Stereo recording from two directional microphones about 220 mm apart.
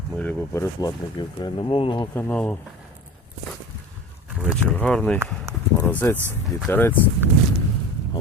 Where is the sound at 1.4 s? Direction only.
25° left (ahead or behind).